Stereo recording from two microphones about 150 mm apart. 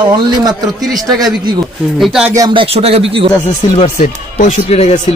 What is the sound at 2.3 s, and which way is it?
Speech, 30° right (ahead or behind).